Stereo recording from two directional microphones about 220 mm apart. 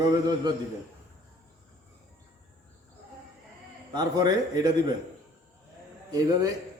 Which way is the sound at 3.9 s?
20° right (ahead or behind).